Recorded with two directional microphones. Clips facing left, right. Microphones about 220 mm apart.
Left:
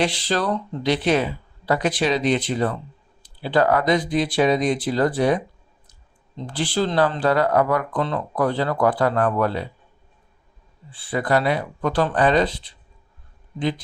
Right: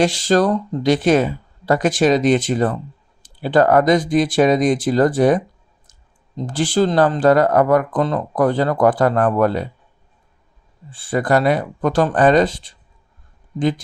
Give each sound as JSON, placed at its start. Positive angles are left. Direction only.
{"t": 0.0, "sound": "speech", "side_deg": -45}
{"t": 10.9, "sound": "speech", "side_deg": -45}